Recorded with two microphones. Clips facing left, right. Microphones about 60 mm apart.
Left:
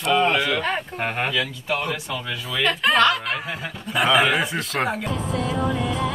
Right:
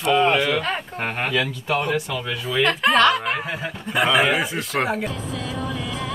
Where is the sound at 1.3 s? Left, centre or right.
Right.